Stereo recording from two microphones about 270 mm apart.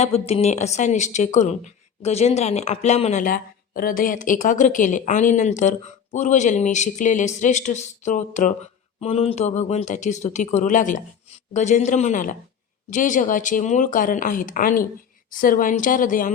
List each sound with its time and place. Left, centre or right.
0.0 s a woman's voice: left